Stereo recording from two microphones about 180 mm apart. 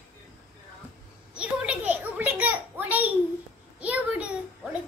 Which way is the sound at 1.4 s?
5° right (ahead or behind).